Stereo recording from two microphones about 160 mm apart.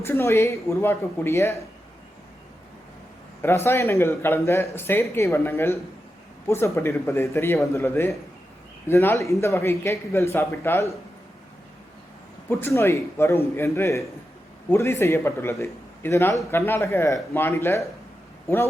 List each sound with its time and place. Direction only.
0.0 s speech: 15° left (ahead or behind)
3.4 s speech: 15° left (ahead or behind)
12.5 s speech: 15° left (ahead or behind)